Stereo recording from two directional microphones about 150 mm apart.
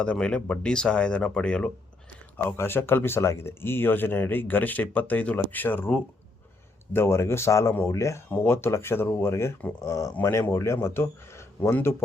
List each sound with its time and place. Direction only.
0.0 s speech: 5° left (ahead or behind)